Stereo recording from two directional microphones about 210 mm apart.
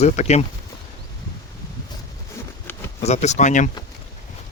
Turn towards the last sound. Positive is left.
turn(degrees=35)  # may be behind; listen again after turning